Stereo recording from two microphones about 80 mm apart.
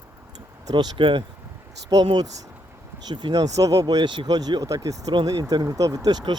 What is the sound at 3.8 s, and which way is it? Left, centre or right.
Speech, right.